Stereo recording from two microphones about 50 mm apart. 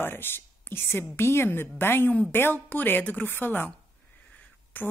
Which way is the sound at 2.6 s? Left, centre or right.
Left.